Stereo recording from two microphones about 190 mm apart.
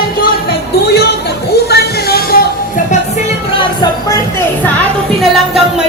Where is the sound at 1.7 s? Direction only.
55° left (ahead or behind).